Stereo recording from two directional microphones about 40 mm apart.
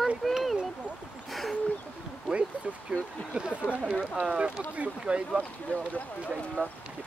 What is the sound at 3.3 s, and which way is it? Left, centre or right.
Speech, right.